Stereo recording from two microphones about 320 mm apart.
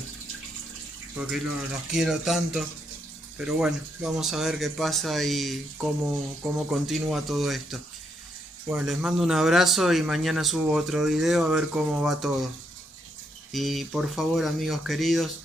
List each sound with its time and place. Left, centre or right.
1.2 s a man's voice: centre
6.7 s a man's voice: centre
13.5 s a man's voice: centre